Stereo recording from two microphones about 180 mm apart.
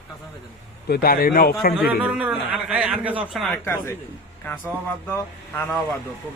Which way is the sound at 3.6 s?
10° left (ahead or behind).